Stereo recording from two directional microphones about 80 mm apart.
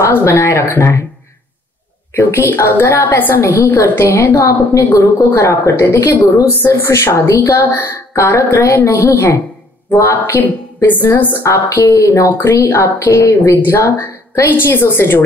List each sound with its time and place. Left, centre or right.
0.0 s a woman's voice: left
2.1 s a woman's voice: left
13.4 s a woman's voice: left